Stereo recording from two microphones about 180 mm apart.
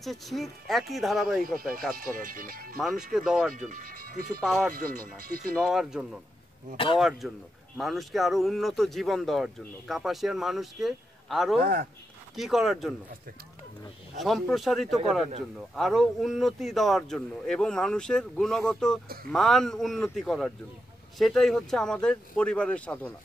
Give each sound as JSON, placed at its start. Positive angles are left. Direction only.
{"t": 0.0, "sound": "speech", "side_deg": 0}
{"t": 1.4, "sound": "speech", "side_deg": -50}
{"t": 2.8, "sound": "speech", "side_deg": 0}
{"t": 3.5, "sound": "speech", "side_deg": -50}
{"t": 4.4, "sound": "speech", "side_deg": 5}
{"t": 4.7, "sound": "speech", "side_deg": -55}
{"t": 5.6, "sound": "speech", "side_deg": -5}
{"t": 11.6, "sound": "speech", "side_deg": -55}
{"t": 12.4, "sound": "speech", "side_deg": 0}
{"t": 14.2, "sound": "speech", "side_deg": 0}